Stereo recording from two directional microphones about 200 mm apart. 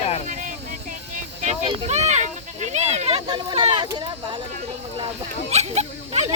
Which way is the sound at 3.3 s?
20° right (ahead or behind).